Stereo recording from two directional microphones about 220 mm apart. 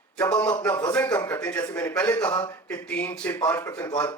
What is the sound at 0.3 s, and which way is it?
A man's voice, 10° left (ahead or behind).